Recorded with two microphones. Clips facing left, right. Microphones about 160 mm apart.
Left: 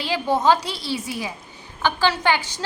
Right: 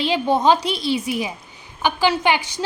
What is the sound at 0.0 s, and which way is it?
A woman's voice, 20° right (ahead or behind).